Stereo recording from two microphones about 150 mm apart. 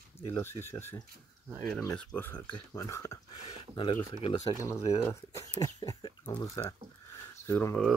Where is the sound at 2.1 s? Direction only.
15° left (ahead or behind).